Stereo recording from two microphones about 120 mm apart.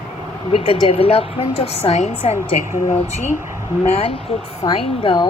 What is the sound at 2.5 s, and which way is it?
Speech, 90° left.